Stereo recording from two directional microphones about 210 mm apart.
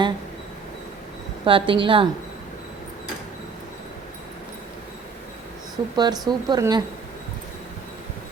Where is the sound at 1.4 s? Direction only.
25° right (ahead or behind).